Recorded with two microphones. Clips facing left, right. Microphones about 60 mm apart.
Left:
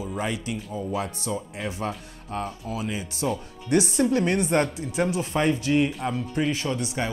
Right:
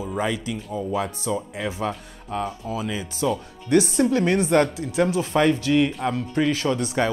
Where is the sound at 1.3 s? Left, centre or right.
Right.